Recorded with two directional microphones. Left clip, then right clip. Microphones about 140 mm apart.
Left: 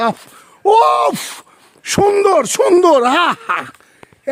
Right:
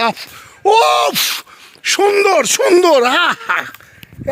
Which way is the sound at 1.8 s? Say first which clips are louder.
Even; 35° left (ahead or behind).